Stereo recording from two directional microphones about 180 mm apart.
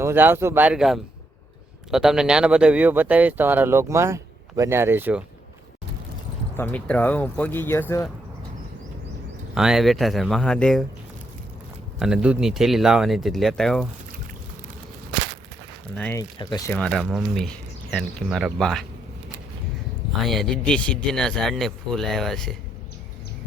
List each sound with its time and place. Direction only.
0.0 s speech: 10° right (ahead or behind)
6.6 s speech: 10° left (ahead or behind)
9.6 s speech: centre (ahead or behind)
11.9 s speech: 5° right (ahead or behind)
16.0 s speech: 10° left (ahead or behind)
16.4 s speech: 20° left (ahead or behind)
16.7 s speech: 5° left (ahead or behind)
20.2 s speech: centre (ahead or behind)